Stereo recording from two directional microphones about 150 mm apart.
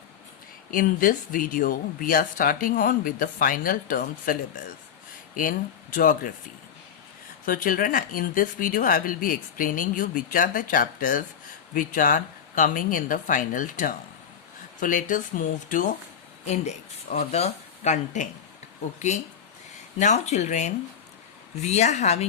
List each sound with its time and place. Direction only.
0.7 s speech: 65° left (ahead or behind)
7.4 s speech: 70° left (ahead or behind)
16.5 s speech: 45° left (ahead or behind)